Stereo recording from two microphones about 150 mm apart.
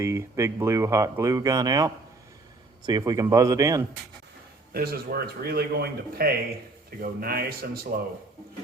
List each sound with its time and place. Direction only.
0.0 s speech: 20° right (ahead or behind)
4.7 s speech: 90° right